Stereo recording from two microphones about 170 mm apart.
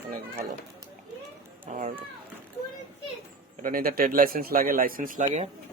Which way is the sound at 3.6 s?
60° right (ahead or behind).